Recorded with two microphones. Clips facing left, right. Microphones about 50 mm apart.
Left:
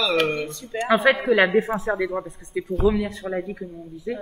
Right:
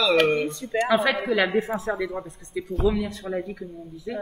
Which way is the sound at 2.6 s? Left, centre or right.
Left.